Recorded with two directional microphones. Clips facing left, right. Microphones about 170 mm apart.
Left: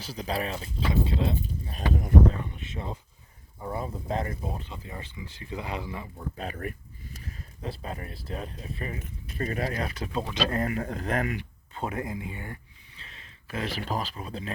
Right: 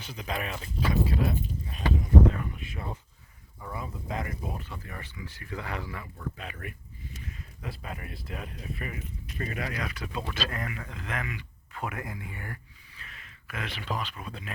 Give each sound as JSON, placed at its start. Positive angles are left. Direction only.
{"t": 0.0, "sound": "speech", "side_deg": 35}
{"t": 1.7, "sound": "speech", "side_deg": 45}
{"t": 2.3, "sound": "speech", "side_deg": 30}
{"t": 6.3, "sound": "a sound", "side_deg": 40}
{"t": 8.3, "sound": "speech", "side_deg": 35}